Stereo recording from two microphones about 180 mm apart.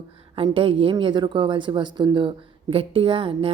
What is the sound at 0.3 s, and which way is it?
A woman's voice, 30° right (ahead or behind).